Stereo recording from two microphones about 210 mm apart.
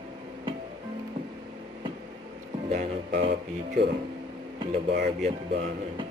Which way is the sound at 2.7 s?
40° right (ahead or behind).